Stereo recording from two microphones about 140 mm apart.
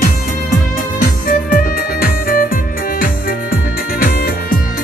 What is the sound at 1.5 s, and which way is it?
Music, 90° left.